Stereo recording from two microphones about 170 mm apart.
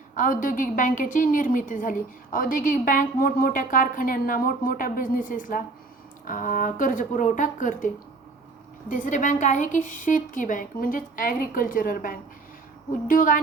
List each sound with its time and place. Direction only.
0.2 s a woman's voice: 50° left (ahead or behind)
8.9 s a woman's voice: 50° left (ahead or behind)